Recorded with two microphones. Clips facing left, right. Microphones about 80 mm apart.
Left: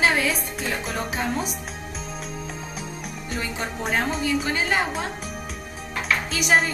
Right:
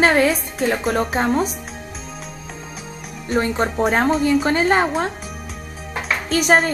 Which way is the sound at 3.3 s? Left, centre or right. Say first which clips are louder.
Right 11 dB; right.